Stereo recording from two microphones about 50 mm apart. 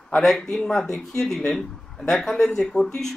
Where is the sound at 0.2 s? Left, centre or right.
Centre.